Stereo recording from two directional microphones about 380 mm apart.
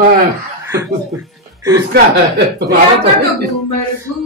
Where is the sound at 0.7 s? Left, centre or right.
Centre.